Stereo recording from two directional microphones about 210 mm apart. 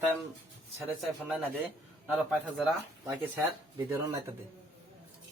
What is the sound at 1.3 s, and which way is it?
Speech, 5° right (ahead or behind).